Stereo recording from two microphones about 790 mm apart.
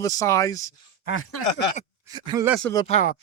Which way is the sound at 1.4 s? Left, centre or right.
Left.